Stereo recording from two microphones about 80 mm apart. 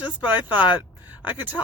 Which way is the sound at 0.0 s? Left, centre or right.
Centre.